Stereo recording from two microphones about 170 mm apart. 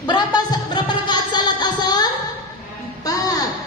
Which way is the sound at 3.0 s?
20° left (ahead or behind).